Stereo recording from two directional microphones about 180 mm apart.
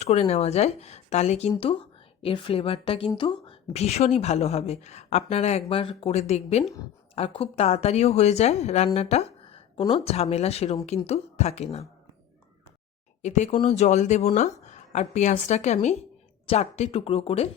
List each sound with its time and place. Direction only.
0.0 s a woman's voice: 35° left (ahead or behind)
13.2 s a woman's voice: 40° left (ahead or behind)